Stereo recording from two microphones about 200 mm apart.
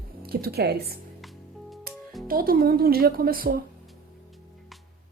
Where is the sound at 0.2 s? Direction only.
50° right (ahead or behind).